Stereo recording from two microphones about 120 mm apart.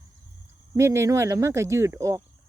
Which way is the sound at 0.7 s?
20° right (ahead or behind).